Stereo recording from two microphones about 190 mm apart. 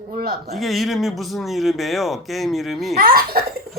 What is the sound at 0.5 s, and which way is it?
Speech, centre (ahead or behind).